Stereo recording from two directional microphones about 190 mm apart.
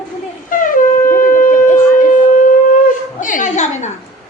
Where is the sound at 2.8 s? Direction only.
45° left (ahead or behind).